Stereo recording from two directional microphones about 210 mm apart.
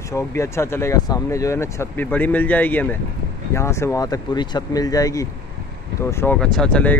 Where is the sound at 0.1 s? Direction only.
15° left (ahead or behind).